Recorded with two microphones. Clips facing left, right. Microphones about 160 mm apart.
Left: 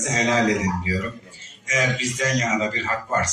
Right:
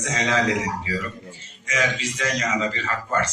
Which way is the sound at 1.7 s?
40° left (ahead or behind).